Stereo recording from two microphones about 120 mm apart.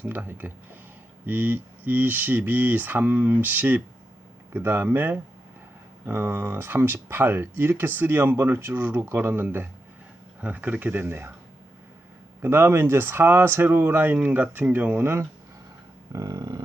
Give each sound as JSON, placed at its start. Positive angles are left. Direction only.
{"t": 0.0, "sound": "speech", "side_deg": -15}
{"t": 12.4, "sound": "speech", "side_deg": -20}
{"t": 16.1, "sound": "a sound", "side_deg": -35}